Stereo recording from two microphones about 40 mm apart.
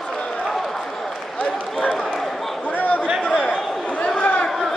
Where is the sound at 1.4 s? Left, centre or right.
Left.